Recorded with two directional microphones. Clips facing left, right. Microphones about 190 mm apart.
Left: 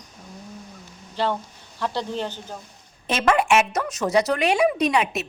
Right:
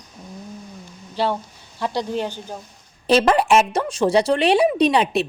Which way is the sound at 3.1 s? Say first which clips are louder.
Right 4 dB; 35° right (ahead or behind).